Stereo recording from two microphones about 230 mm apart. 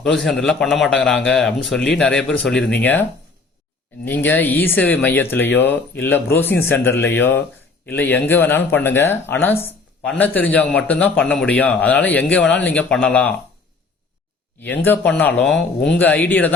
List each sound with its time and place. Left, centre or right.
0.0 s a man's voice: centre
4.0 s speech: centre
14.6 s speech: centre